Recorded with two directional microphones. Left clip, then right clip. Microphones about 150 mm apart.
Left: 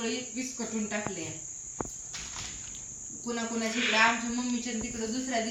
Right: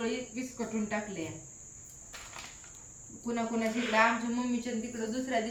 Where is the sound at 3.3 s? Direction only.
15° right (ahead or behind).